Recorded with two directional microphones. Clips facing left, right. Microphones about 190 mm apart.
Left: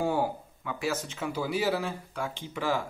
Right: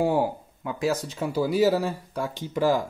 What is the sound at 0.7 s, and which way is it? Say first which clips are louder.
Speech: right 6 dB; 35° right (ahead or behind).